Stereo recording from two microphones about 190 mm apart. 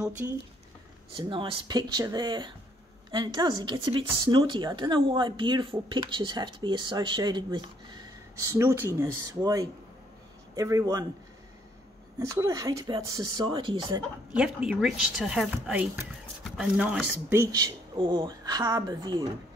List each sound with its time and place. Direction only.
0.2 s speech: 15° right (ahead or behind)
1.1 s speech: 25° right (ahead or behind)
12.4 s speech: 20° right (ahead or behind)
14.3 s speech: 5° right (ahead or behind); by 19.2 s 20° right (ahead or behind)